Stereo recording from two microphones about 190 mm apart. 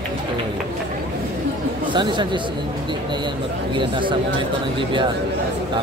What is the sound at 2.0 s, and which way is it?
Speech, 25° right (ahead or behind).